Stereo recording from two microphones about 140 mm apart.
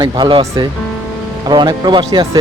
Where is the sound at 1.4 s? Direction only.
30° right (ahead or behind).